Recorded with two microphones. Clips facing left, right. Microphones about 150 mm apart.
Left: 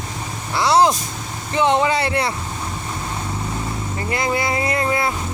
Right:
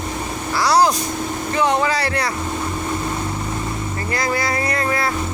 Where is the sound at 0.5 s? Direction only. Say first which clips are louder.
Left 1 dB; 25° left (ahead or behind).